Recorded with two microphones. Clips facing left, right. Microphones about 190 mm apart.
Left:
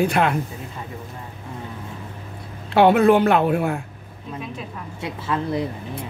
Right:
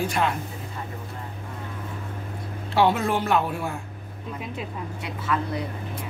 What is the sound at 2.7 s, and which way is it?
Speech, 60° left (ahead or behind).